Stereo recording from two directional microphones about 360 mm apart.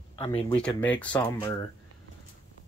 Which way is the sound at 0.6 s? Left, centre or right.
Centre.